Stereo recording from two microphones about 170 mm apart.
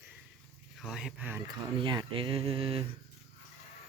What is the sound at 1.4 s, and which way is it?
Speech, 30° right (ahead or behind).